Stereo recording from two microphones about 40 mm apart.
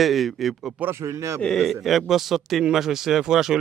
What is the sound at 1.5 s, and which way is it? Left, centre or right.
A man's voice, centre.